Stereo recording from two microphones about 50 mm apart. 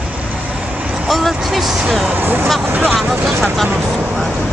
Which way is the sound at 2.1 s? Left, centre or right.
Right.